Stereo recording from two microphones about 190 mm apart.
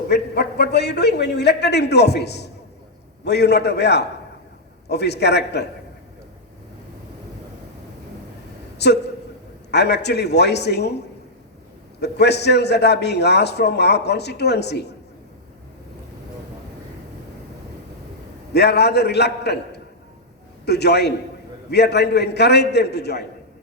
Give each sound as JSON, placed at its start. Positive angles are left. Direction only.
{"t": 0.1, "sound": "a man's voice", "side_deg": 60}
{"t": 8.8, "sound": "a man's voice", "side_deg": 60}
{"t": 11.9, "sound": "a man's voice", "side_deg": 60}
{"t": 18.5, "sound": "a man's voice", "side_deg": 60}
{"t": 20.7, "sound": "a man's voice", "side_deg": 60}